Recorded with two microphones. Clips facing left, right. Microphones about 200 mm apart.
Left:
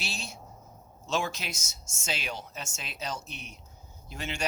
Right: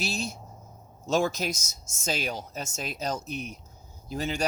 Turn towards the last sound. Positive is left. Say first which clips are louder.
# right 6 dB
turn(degrees=-35)  # may be behind; listen again after turning